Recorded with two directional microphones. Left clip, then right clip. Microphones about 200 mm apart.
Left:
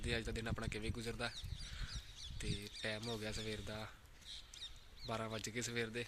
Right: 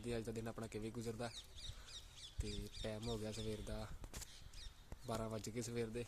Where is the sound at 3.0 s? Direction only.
5° left (ahead or behind).